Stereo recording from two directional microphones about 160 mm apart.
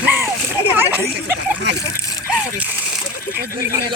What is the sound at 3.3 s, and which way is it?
Speech, 65° right (ahead or behind).